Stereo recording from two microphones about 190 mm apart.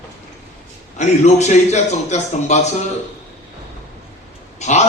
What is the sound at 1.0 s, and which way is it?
A man's voice, 40° left (ahead or behind).